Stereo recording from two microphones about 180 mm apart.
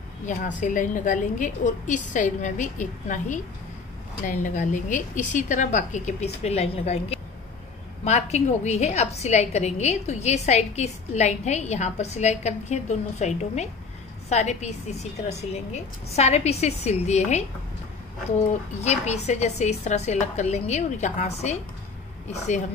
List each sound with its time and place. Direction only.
0.6 s a woman's voice: 45° left (ahead or behind)
18.5 s a woman's voice: 40° left (ahead or behind)